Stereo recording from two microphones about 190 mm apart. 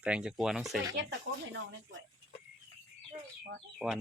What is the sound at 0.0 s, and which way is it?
Speech, 5° right (ahead or behind).